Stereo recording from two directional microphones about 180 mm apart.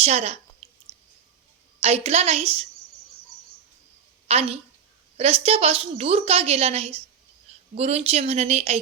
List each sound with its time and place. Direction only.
0.0 s a woman's voice: 35° right (ahead or behind)
0.6 s a sound: 30° right (ahead or behind)
1.8 s a woman's voice: 35° right (ahead or behind)
4.3 s a woman's voice: 35° right (ahead or behind)